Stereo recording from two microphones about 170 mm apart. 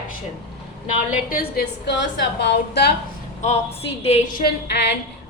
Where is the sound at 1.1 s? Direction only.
60° left (ahead or behind); by 2.9 s 80° left.